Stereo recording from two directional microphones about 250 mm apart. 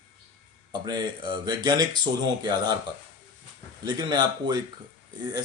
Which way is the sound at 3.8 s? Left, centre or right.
Centre.